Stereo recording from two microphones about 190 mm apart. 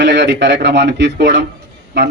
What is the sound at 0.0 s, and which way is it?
A man's voice, 65° right (ahead or behind).